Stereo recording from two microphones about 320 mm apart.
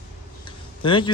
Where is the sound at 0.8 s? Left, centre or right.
Centre.